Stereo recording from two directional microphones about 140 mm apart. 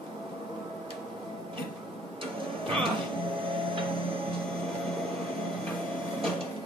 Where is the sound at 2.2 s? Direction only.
40° right (ahead or behind).